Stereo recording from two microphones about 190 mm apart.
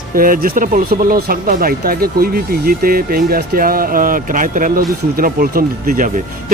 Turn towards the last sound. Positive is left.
turn(degrees=-50)  # may be behind; listen again after turning